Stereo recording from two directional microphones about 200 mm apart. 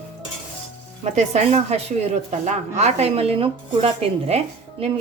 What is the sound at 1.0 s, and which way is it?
A woman's voice, 35° right (ahead or behind).